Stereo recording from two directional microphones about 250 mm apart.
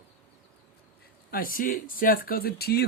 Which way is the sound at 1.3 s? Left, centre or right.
Left.